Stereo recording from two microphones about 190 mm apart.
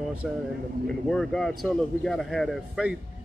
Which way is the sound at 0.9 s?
Centre (ahead or behind).